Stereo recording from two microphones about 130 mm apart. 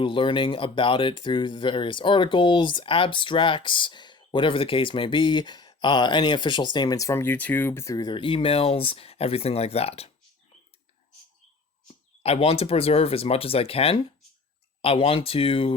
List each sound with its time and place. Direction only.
0.0 s speech: 40° left (ahead or behind); by 7.9 s 20° left (ahead or behind)
7.9 s speech: 35° left (ahead or behind); by 10.1 s 50° left (ahead or behind)
12.2 s speech: 50° left (ahead or behind)